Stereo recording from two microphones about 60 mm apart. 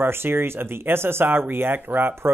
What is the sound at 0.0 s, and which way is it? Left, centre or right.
Speech, right.